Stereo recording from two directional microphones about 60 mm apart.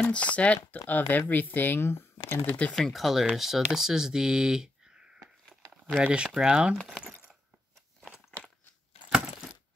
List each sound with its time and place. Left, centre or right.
0.0 s speech: left
2.7 s speech: centre
8.0 s crunch: centre
9.1 s a sound: centre